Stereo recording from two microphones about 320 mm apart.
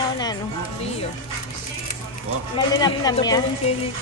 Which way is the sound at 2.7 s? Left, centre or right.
Centre.